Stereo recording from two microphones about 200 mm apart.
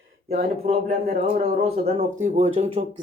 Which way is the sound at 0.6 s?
35° right (ahead or behind).